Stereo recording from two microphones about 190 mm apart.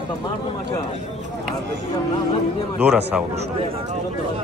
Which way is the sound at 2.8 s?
5° right (ahead or behind).